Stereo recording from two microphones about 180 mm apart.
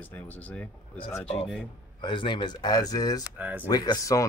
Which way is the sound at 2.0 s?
25° left (ahead or behind).